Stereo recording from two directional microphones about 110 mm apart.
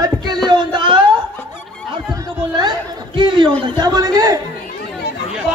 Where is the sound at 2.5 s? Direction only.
45° right (ahead or behind).